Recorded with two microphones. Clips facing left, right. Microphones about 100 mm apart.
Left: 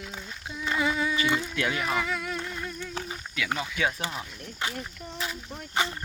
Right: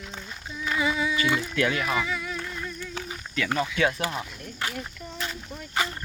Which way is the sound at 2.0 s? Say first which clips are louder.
Even; 55° left (ahead or behind).